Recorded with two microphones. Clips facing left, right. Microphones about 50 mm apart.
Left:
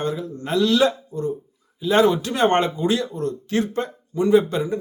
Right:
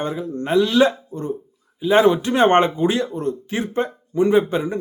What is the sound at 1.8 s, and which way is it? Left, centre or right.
A man's voice, right.